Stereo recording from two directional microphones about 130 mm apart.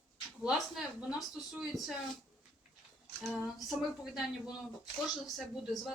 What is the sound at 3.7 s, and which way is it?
Speech, 5° right (ahead or behind).